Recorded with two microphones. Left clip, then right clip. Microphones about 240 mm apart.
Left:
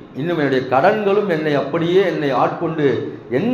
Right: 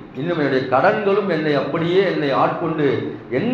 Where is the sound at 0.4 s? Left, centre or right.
Left.